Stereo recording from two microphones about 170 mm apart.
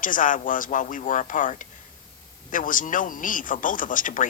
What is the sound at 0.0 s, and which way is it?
Speech, 50° left (ahead or behind).